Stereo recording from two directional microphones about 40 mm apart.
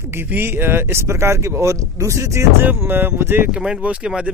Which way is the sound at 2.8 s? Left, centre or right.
Right.